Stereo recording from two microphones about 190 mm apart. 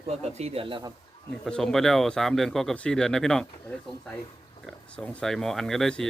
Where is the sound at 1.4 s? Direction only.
Centre (ahead or behind).